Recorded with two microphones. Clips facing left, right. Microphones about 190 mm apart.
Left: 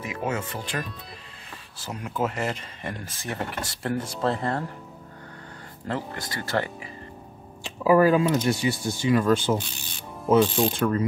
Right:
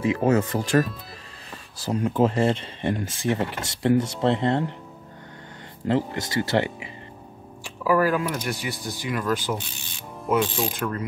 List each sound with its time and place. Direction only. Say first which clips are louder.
0.0 s speech: right 9 dB; 35° right (ahead or behind)
1.8 s speech: right 7 dB; 35° right (ahead or behind)
5.9 s speech: right 7 dB; 25° right (ahead or behind)
7.6 s speech: left 3 dB; 25° left (ahead or behind)